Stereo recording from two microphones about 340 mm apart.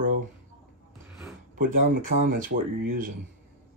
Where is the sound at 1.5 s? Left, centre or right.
Right.